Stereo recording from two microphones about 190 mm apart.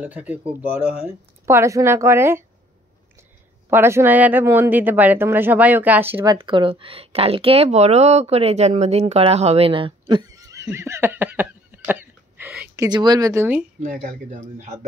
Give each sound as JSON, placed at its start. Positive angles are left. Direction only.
{"t": 0.0, "sound": "speech", "side_deg": -10}
{"t": 3.7, "sound": "speech", "side_deg": -10}
{"t": 6.3, "sound": "speech", "side_deg": -25}
{"t": 12.8, "sound": "speech", "side_deg": -20}
{"t": 13.8, "sound": "speech", "side_deg": -40}